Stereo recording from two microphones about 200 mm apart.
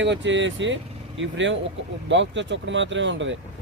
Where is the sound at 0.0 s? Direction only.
65° right (ahead or behind).